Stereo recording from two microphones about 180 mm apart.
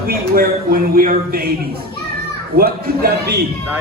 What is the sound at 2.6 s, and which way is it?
Speech, 55° right (ahead or behind).